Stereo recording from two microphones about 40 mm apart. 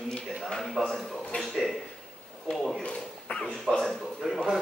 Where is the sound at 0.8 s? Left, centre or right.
Centre.